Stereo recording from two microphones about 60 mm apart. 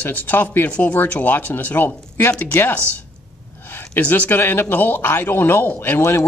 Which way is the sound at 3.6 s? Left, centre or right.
Left.